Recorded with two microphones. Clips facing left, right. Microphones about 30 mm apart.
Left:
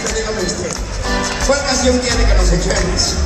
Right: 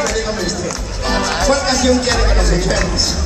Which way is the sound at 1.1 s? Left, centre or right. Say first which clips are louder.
Right 1 dB; centre.